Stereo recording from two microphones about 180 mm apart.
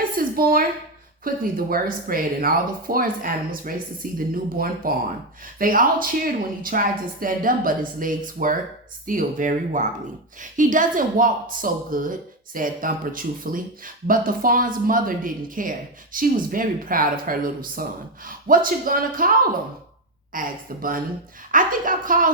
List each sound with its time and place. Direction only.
0.2 s a sound: 55° right (ahead or behind)
1.2 s speech: 55° right (ahead or behind)
20.3 s speech: 50° right (ahead or behind)